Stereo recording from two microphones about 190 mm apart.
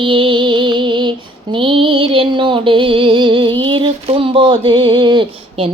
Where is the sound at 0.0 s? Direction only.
25° right (ahead or behind).